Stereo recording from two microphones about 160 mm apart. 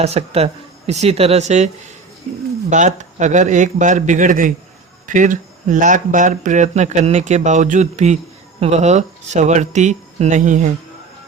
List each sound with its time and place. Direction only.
0.0 s speech: 40° right (ahead or behind)